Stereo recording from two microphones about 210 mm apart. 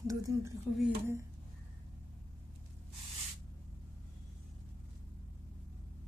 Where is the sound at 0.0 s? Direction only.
15° right (ahead or behind).